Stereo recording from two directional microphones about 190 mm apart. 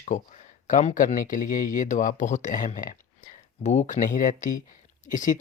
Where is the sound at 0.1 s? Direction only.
40° left (ahead or behind).